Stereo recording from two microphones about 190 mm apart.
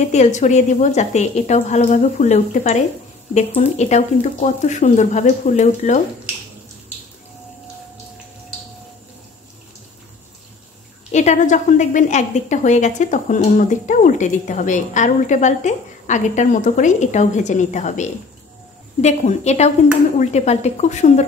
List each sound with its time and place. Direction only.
0.0 s a woman's voice: 40° left (ahead or behind)
11.1 s a woman's voice: 35° left (ahead or behind)